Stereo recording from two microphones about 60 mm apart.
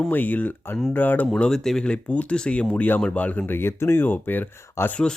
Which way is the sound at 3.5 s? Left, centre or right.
Left.